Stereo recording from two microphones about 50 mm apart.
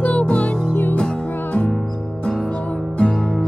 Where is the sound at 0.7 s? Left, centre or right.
Left.